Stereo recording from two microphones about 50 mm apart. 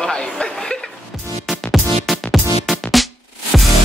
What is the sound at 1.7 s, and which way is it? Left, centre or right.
Music, centre.